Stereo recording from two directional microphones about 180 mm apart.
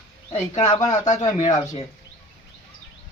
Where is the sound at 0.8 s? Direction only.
40° left (ahead or behind).